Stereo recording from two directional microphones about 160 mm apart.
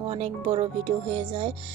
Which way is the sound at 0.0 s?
35° right (ahead or behind).